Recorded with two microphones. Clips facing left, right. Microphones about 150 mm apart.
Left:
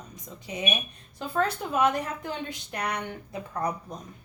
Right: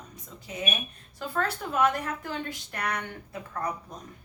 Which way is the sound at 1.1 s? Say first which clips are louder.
Left 3 dB; 20° left (ahead or behind).